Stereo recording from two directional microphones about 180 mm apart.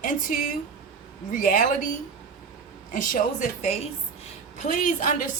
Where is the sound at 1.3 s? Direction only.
50° left (ahead or behind).